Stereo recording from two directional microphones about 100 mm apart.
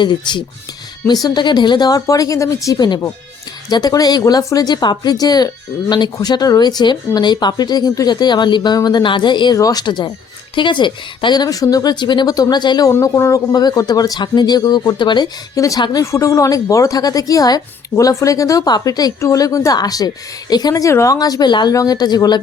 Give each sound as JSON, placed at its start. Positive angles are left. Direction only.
{"t": 0.0, "sound": "a woman's voice", "side_deg": 50}
{"t": 2.7, "sound": "a woman's voice", "side_deg": 45}
{"t": 9.6, "sound": "speech", "side_deg": 40}
{"t": 12.9, "sound": "speech", "side_deg": 25}
{"t": 13.5, "sound": "a woman's voice", "side_deg": 40}
{"t": 15.5, "sound": "a woman's voice", "side_deg": 35}
{"t": 15.8, "sound": "speech", "side_deg": 45}
{"t": 16.1, "sound": "a woman's voice", "side_deg": 30}